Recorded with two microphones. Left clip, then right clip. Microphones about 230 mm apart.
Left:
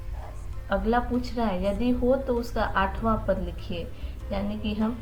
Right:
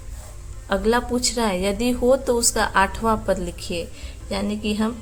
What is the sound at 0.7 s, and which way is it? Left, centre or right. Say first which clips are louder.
A woman's voice: right 5 dB; right.